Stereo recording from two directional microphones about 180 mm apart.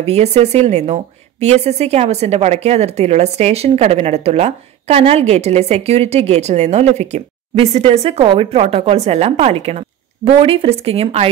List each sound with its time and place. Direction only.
0.0 s a woman's voice: 35° right (ahead or behind)